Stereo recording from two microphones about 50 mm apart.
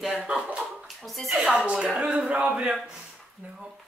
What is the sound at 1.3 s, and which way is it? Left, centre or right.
Speech, centre.